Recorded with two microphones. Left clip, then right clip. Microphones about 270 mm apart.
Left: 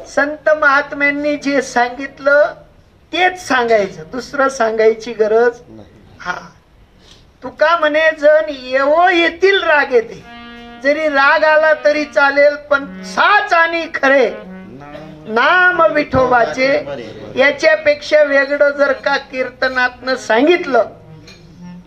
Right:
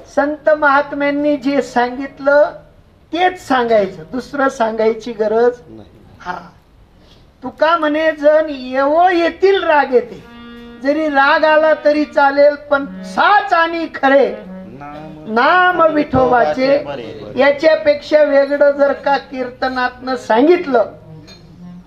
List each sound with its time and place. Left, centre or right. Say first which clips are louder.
0.1 s speech: even; left
7.4 s speech: left 1 dB; left
15.3 s a woman's voice: even; left